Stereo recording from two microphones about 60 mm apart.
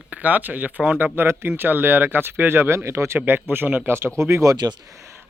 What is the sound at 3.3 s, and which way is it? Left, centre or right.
Speech, right.